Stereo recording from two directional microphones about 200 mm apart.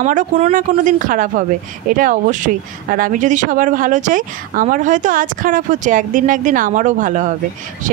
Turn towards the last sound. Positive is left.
turn(degrees=-40)  # may be behind; listen again after turning